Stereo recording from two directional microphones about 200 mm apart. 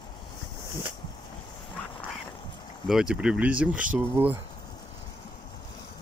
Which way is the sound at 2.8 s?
5° right (ahead or behind).